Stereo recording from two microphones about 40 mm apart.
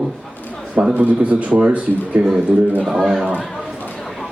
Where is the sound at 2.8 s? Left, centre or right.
Centre.